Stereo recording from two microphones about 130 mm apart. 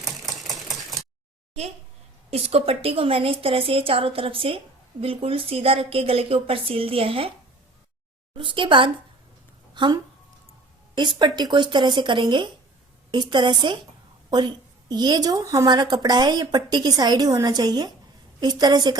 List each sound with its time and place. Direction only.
0.0 s typewriter: centre (ahead or behind)
2.3 s a woman's voice: 50° right (ahead or behind)
8.4 s a woman's voice: 40° right (ahead or behind)